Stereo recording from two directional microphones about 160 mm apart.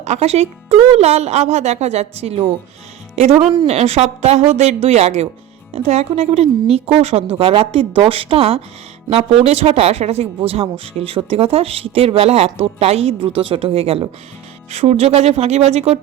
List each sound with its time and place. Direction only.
0.0 s a woman's voice: 45° right (ahead or behind)